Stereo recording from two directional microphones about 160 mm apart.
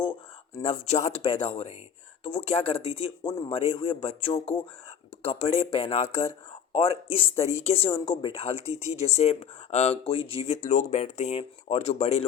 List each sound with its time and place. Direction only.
0.6 s speech: 45° left (ahead or behind)